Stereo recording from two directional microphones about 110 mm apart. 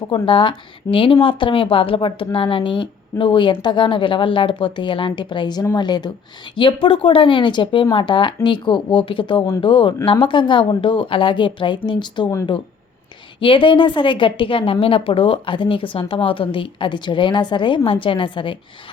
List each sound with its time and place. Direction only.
0.1 s speech: 50° left (ahead or behind)
13.4 s speech: 50° left (ahead or behind)